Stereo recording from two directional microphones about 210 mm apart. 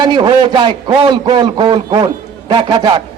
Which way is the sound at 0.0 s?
20° right (ahead or behind).